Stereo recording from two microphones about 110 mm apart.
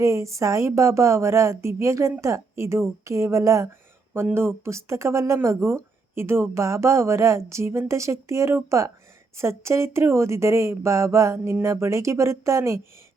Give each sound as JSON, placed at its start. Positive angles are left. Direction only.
{"t": 0.0, "sound": "speech", "side_deg": -25}